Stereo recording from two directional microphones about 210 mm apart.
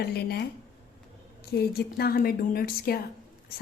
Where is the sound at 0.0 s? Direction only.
50° left (ahead or behind).